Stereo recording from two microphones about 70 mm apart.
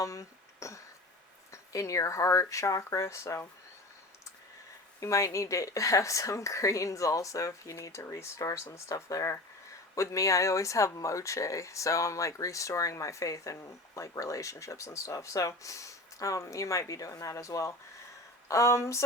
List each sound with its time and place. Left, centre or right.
0.0 s speech: left
4.9 s speech: left